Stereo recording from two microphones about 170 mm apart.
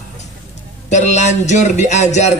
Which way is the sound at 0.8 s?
45° left (ahead or behind).